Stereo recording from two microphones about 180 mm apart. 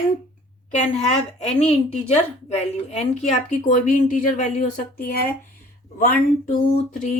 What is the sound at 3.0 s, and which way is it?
Speech, 40° left (ahead or behind).